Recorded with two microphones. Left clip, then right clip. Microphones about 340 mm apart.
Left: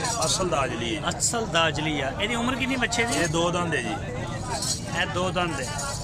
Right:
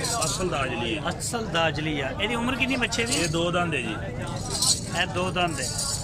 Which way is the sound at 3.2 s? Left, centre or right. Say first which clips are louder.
Left 1 dB; centre.